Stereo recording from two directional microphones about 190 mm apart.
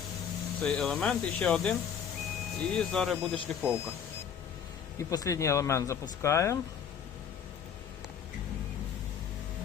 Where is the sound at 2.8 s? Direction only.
5° left (ahead or behind).